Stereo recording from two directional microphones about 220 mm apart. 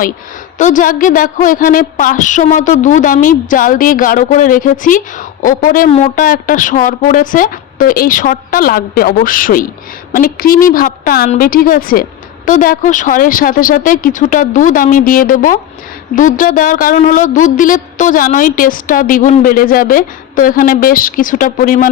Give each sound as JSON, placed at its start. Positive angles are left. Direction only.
{"t": 0.6, "sound": "a woman's voice", "side_deg": 35}